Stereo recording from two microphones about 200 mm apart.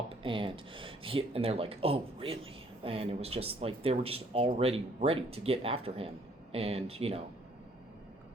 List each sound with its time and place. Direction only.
0.1 s speech: 25° right (ahead or behind)